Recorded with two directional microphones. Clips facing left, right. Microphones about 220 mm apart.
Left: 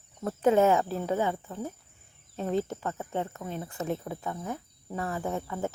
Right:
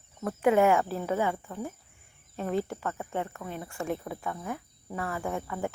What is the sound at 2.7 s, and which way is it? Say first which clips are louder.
Speech: even; 20° left (ahead or behind).